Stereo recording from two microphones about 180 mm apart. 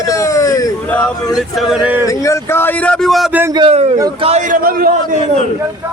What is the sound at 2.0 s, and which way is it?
Speech, 15° left (ahead or behind).